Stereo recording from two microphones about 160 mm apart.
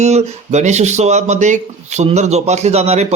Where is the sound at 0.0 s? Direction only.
45° right (ahead or behind).